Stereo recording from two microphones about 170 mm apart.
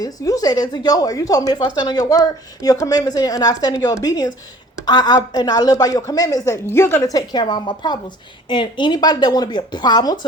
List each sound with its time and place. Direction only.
0.0 s a woman's voice: 20° left (ahead or behind)